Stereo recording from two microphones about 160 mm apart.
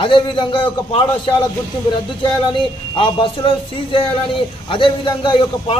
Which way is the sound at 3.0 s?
30° left (ahead or behind).